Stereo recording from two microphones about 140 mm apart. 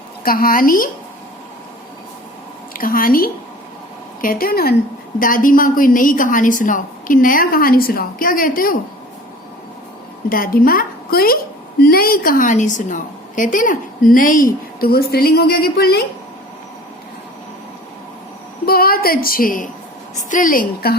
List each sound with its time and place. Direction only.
0.2 s a woman's voice: 90° left
2.7 s a woman's voice: 90° left
5.2 s a woman's voice: 80° left
10.2 s a woman's voice: 90° left
18.6 s a woman's voice: 90° left
20.3 s a woman's voice: 80° left